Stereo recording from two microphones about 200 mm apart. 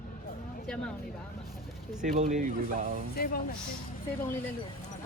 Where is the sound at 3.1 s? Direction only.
50° left (ahead or behind).